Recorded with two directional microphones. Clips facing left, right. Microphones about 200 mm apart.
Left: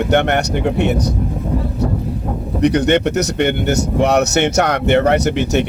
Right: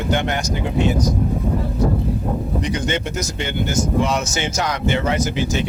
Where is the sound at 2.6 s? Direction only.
65° left (ahead or behind).